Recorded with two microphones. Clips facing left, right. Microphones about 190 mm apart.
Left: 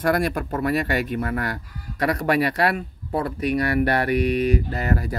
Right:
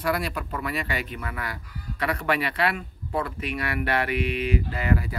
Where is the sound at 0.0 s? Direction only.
50° left (ahead or behind).